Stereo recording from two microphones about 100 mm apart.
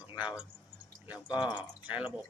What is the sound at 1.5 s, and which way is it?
Speech, 15° right (ahead or behind).